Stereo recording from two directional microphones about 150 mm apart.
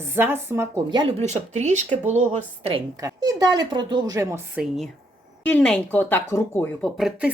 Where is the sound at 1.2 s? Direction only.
50° right (ahead or behind).